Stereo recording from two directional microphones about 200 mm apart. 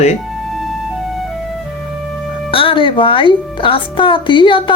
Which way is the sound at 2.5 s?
25° left (ahead or behind).